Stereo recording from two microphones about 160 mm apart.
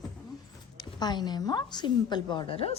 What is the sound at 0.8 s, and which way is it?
A woman's voice, 25° left (ahead or behind).